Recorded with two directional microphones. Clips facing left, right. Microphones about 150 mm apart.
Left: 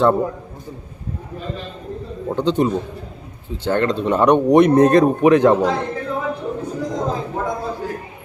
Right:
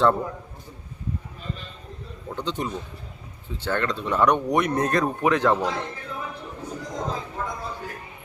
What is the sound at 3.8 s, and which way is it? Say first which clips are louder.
Speech: left 6 dB; 30° left (ahead or behind).